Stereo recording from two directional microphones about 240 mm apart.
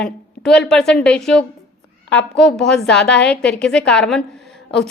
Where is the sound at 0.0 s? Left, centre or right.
Centre.